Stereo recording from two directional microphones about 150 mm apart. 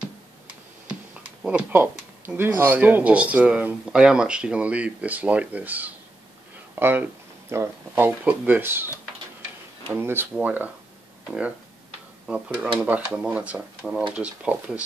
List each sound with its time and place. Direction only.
1.4 s speech: 10° right (ahead or behind)
9.9 s speech: 15° right (ahead or behind)
12.8 s speech: 10° right (ahead or behind)